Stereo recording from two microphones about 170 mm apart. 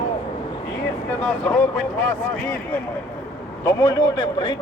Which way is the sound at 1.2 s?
5° left (ahead or behind).